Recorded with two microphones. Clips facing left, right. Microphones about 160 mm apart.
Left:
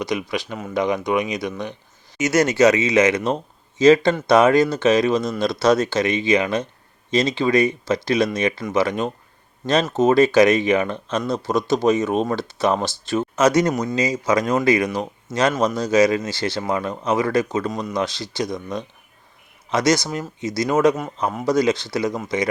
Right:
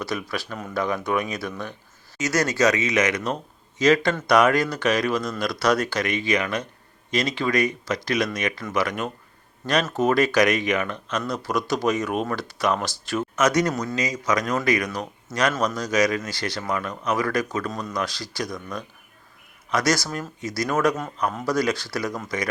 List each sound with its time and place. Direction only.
0.0 s speech: 15° left (ahead or behind)
17.7 s speech: 15° left (ahead or behind)
17.9 s speech: 25° left (ahead or behind)